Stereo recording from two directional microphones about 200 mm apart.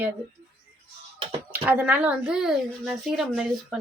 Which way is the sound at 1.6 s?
10° right (ahead or behind).